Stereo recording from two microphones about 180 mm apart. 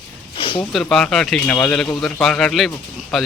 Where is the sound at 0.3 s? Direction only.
30° left (ahead or behind).